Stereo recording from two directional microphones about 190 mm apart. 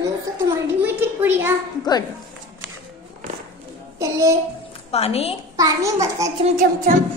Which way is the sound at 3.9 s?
15° right (ahead or behind).